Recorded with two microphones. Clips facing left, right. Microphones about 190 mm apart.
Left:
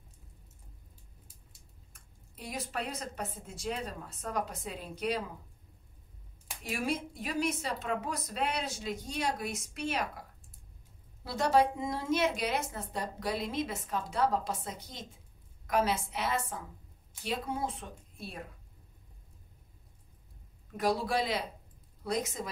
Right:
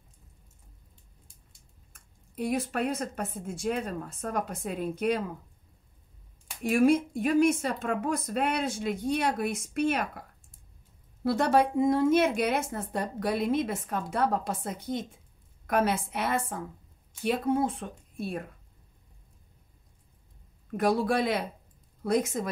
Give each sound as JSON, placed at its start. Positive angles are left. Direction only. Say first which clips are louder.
{"t": 2.0, "sound": "speech", "louder": "right 15 dB", "side_deg": -55}
{"t": 6.6, "sound": "speech", "louder": "right 12 dB", "side_deg": -50}
{"t": 11.2, "sound": "a woman's voice", "louder": "right 3 dB", "side_deg": -55}
{"t": 20.7, "sound": "a woman's voice", "louder": "right 5 dB", "side_deg": -55}